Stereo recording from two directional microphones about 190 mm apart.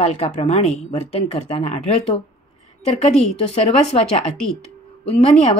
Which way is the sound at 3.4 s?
35° left (ahead or behind).